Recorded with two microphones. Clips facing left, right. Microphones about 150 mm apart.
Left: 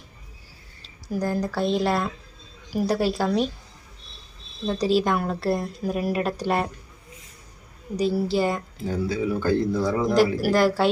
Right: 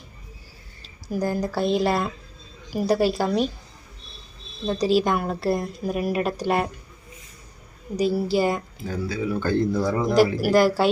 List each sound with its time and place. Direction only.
1.1 s speech: 5° right (ahead or behind)
4.6 s speech: 5° right (ahead or behind)
7.9 s a woman's voice: 5° right (ahead or behind)
8.8 s speech: 25° left (ahead or behind)
9.3 s a man's voice: 5° left (ahead or behind)